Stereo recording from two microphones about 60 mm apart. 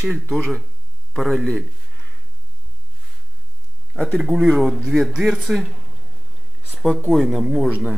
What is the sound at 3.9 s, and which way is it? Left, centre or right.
Speech, centre.